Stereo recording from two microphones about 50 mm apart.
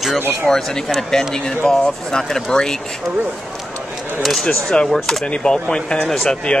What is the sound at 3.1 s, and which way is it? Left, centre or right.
Speech, right.